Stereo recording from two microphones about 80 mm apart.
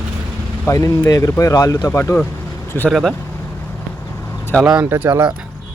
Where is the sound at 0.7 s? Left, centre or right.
Left.